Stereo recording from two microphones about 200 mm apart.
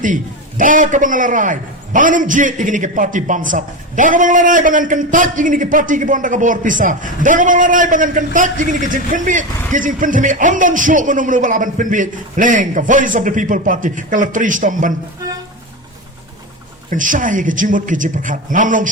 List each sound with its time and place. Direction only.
0.0 s a man's voice: 40° right (ahead or behind)
16.9 s a man's voice: 40° right (ahead or behind)